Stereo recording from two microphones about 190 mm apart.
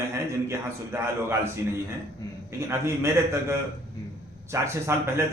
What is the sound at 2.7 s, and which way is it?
Speech, 15° right (ahead or behind).